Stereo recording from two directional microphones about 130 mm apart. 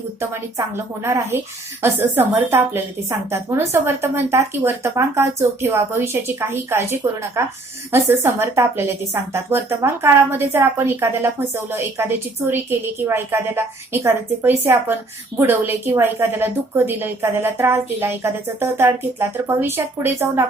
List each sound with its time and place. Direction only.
0.2 s a woman's voice: 20° right (ahead or behind)